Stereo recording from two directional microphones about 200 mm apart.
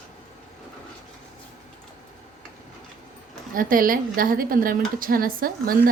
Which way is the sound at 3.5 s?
45° right (ahead or behind).